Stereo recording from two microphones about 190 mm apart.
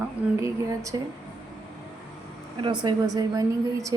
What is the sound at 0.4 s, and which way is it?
Speech, 15° right (ahead or behind).